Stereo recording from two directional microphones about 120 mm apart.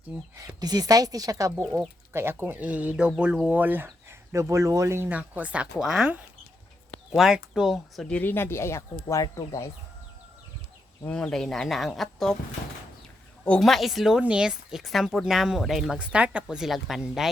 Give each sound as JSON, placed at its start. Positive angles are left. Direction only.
{"t": 0.3, "sound": "a woman's voice", "side_deg": -30}
{"t": 8.0, "sound": "speech", "side_deg": 15}
{"t": 11.0, "sound": "a woman's voice", "side_deg": 5}
{"t": 13.4, "sound": "a woman's voice", "side_deg": 5}